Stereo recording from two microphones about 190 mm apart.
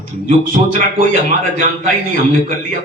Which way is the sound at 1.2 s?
45° right (ahead or behind).